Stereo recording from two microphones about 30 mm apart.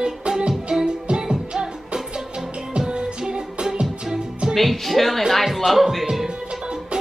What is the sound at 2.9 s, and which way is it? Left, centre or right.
Music, right.